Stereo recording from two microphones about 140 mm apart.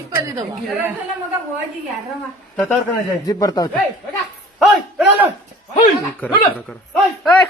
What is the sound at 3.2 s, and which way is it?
Speech, 25° left (ahead or behind).